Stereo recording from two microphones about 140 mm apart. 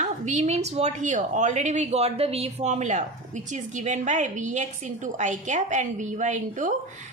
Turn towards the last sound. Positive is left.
turn(degrees=-60)  # may be behind; listen again after turning